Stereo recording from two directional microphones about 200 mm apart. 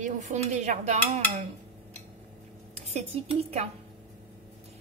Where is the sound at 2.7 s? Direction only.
30° right (ahead or behind).